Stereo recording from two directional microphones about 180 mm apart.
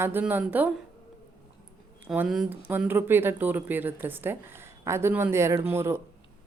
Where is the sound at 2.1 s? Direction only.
Centre (ahead or behind).